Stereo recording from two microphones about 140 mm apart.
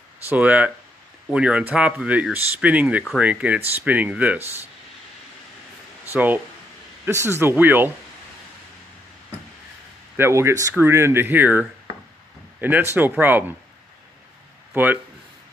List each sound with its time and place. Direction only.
0.3 s speech: 10° right (ahead or behind)
6.1 s speech: 10° right (ahead or behind)
10.1 s a man's voice: 20° right (ahead or behind)
14.7 s speech: 10° right (ahead or behind)